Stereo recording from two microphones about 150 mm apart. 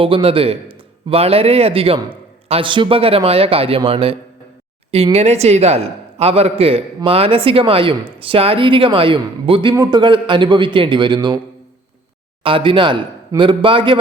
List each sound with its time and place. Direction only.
0.0 s a man's voice: 40° right (ahead or behind)
12.4 s a man's voice: 35° right (ahead or behind)